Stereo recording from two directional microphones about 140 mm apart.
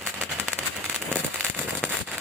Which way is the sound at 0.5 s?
5° left (ahead or behind).